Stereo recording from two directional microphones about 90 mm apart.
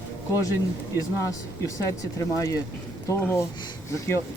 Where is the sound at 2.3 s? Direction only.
35° left (ahead or behind).